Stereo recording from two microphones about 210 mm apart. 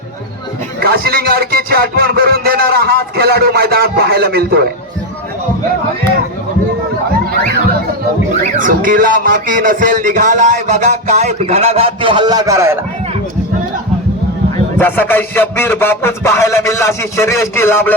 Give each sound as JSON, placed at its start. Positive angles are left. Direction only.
{"t": 0.8, "sound": "speech", "side_deg": -45}
{"t": 8.5, "sound": "music", "side_deg": -40}
{"t": 14.8, "sound": "a man's voice", "side_deg": 10}